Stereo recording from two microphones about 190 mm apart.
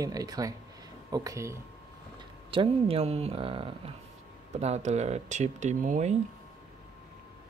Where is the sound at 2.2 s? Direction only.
25° right (ahead or behind).